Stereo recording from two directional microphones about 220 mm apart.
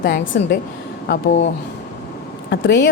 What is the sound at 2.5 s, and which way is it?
Speech, 55° left (ahead or behind).